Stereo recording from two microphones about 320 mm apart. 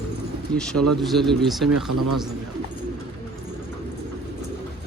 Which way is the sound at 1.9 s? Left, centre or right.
Right.